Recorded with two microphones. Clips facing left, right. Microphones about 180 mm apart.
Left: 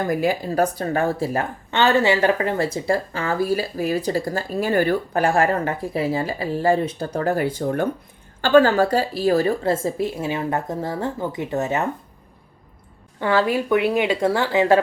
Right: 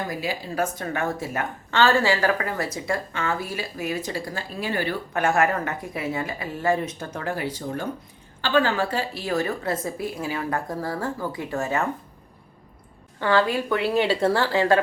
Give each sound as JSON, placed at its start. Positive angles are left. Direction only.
{"t": 0.1, "sound": "a woman's voice", "side_deg": 50}
{"t": 1.7, "sound": "a woman's voice", "side_deg": 20}
{"t": 5.2, "sound": "a woman's voice", "side_deg": 30}
{"t": 13.1, "sound": "a woman's voice", "side_deg": 20}